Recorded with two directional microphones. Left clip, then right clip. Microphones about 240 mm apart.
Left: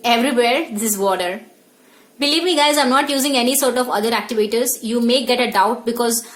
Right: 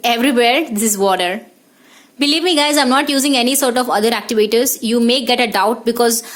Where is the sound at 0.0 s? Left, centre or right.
Right.